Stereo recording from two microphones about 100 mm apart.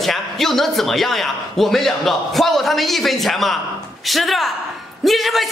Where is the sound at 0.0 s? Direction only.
Centre (ahead or behind).